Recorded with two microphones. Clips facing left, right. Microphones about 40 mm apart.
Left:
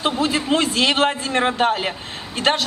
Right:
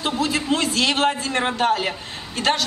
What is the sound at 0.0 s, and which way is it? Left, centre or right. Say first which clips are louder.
A man's voice: left 2 dB; left.